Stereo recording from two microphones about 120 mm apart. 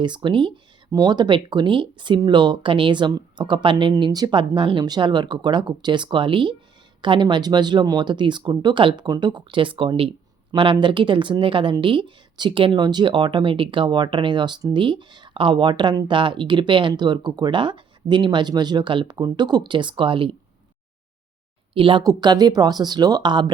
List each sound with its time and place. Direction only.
0.0 s a woman's voice: 40° right (ahead or behind)
0.9 s a woman's voice: 30° right (ahead or behind)
21.7 s speech: 50° right (ahead or behind)
22.0 s speech: 35° right (ahead or behind)